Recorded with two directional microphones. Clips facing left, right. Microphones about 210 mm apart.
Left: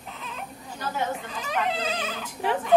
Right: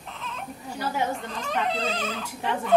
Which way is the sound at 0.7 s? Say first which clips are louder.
Right 2 dB; 10° right (ahead or behind).